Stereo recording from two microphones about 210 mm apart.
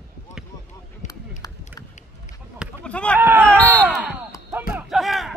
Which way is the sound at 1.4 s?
15° left (ahead or behind).